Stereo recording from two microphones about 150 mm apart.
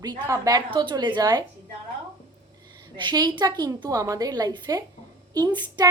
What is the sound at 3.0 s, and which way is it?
A woman's voice, 30° right (ahead or behind).